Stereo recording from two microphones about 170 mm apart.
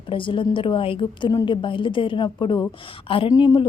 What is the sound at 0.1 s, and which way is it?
A woman's voice, 30° left (ahead or behind).